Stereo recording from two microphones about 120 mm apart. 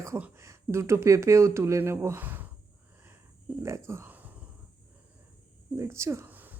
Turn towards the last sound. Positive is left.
turn(degrees=-15)  # may be behind; listen again after turning